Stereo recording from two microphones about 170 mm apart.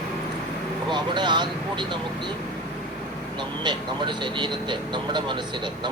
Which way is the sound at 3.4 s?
25° right (ahead or behind).